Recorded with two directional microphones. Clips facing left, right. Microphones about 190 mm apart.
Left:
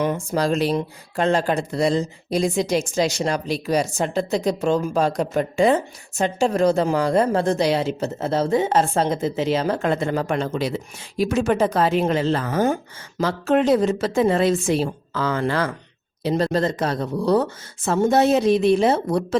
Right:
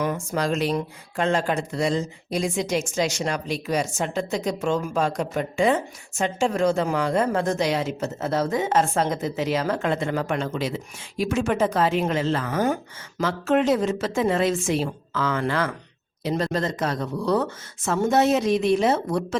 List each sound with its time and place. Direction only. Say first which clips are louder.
0.0 s a woman's voice: left 3 dB; 30° left (ahead or behind)